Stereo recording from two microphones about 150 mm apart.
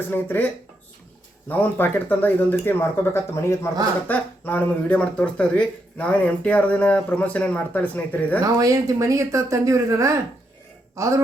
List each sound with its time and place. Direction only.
0.1 s speech: 15° left (ahead or behind)
8.4 s speech: 20° right (ahead or behind)